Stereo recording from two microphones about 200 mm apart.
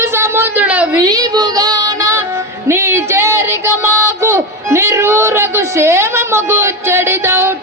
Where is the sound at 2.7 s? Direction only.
15° right (ahead or behind).